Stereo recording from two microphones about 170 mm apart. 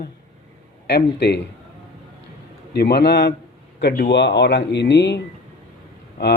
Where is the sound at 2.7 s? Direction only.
70° left (ahead or behind).